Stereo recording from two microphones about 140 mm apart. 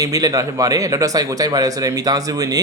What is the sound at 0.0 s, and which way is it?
Speech, 25° right (ahead or behind).